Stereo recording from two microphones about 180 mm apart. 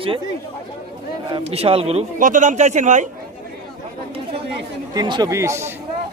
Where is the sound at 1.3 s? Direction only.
35° right (ahead or behind).